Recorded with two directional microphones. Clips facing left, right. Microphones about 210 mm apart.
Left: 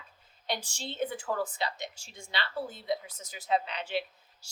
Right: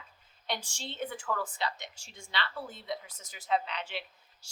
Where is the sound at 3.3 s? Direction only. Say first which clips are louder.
Left 1 dB; 35° left (ahead or behind).